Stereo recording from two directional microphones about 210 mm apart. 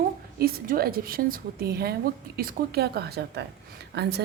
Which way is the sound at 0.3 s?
45° right (ahead or behind).